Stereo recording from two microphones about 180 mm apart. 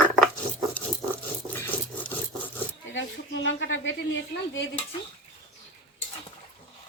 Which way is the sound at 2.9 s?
75° left (ahead or behind).